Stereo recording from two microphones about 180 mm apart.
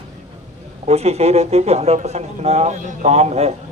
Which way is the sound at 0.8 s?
35° right (ahead or behind).